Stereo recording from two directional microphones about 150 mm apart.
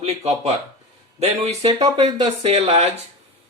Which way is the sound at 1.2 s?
45° right (ahead or behind).